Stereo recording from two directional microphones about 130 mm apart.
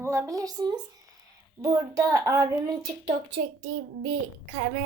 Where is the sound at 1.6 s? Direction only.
25° right (ahead or behind).